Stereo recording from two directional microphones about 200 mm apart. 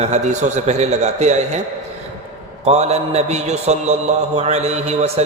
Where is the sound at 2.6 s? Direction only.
35° right (ahead or behind).